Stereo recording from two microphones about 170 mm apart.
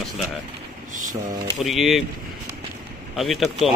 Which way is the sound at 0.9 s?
50° right (ahead or behind).